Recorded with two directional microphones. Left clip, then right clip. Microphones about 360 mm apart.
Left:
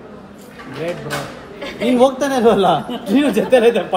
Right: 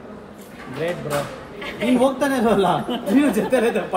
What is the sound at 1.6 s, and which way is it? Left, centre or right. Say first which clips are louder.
A man's voice: left 5 dB; centre.